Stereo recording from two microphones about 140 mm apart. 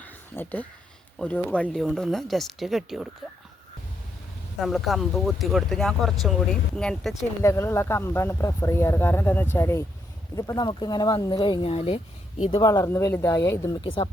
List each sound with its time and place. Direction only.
0.0 s a sound: 10° left (ahead or behind)
1.2 s speech: 10° left (ahead or behind)
4.6 s speech: centre (ahead or behind)
7.4 s speech: 20° left (ahead or behind)
11.7 s speech: 45° left (ahead or behind)
12.5 s speech: 25° left (ahead or behind)
13.8 s speech: 40° left (ahead or behind)